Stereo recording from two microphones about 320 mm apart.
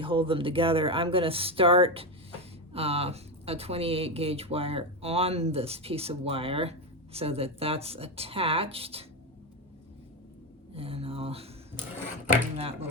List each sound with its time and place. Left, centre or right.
0.0 s speech: centre
10.8 s speech: centre